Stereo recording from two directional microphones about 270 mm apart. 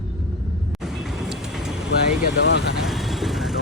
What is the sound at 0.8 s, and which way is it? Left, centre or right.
Vehicle, centre.